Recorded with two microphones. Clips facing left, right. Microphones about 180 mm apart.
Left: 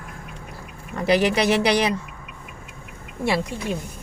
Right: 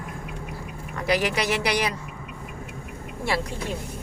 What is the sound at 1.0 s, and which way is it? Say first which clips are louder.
Speech: left 5 dB; 25° left (ahead or behind).